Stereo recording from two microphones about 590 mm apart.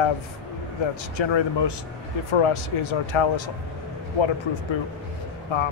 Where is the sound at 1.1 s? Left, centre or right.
Left.